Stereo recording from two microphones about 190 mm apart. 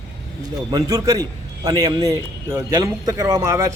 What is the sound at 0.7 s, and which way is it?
A man's voice, 20° right (ahead or behind).